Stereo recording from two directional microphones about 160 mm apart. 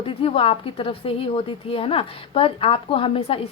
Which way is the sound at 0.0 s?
35° left (ahead or behind).